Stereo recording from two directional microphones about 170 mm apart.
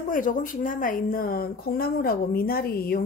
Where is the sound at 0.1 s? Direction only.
50° left (ahead or behind).